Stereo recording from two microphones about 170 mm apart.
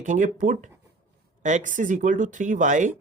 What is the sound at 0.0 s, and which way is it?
Speech, 50° right (ahead or behind).